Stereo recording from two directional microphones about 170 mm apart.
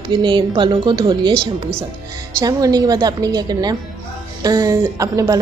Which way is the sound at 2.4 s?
20° right (ahead or behind).